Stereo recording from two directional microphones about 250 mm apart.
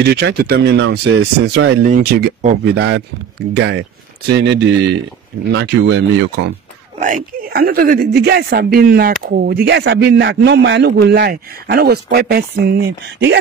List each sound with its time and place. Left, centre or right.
0.0 s speech: right
1.4 s speech: right
1.8 s speech: right
7.0 s speech: right